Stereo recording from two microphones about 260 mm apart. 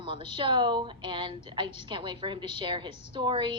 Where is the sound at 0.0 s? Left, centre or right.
Centre.